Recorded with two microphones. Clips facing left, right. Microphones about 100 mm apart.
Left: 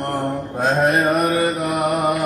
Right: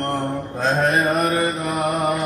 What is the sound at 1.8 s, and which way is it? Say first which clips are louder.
Mantra: left 1 dB; 5° left (ahead or behind).